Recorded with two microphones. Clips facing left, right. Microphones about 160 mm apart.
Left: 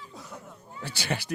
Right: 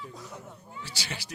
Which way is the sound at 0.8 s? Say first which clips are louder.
Left 9 dB; 55° left (ahead or behind).